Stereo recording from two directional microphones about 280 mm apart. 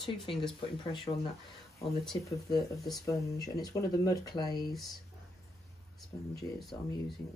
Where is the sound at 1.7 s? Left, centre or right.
Centre.